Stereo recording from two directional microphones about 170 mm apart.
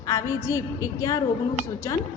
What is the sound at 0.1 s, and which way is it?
A woman's voice, 20° left (ahead or behind).